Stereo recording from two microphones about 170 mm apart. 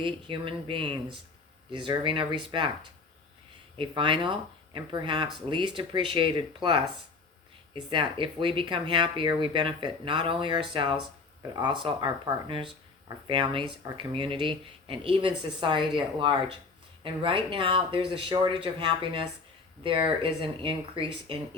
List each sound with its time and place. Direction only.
0.0 s speech: 30° right (ahead or behind)
3.8 s speech: 30° right (ahead or behind)
7.9 s speech: 30° right (ahead or behind)